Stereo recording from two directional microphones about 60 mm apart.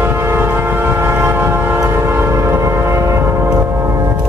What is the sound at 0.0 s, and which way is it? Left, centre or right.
Train, right.